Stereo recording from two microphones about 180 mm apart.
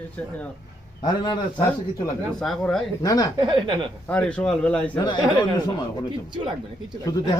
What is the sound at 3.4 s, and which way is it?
Speech, 25° right (ahead or behind).